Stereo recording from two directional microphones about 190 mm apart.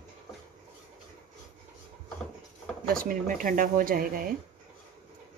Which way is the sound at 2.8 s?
50° right (ahead or behind).